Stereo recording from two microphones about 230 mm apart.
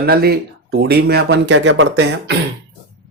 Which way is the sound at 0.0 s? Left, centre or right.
Right.